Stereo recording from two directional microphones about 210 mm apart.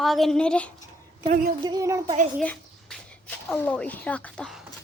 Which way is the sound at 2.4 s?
5° left (ahead or behind).